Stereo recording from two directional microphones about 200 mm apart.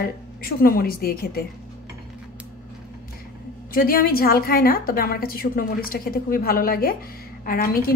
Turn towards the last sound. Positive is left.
turn(degrees=45)  # may be behind; listen again after turning